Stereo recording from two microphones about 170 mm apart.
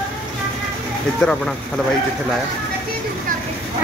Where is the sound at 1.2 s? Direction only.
5° left (ahead or behind).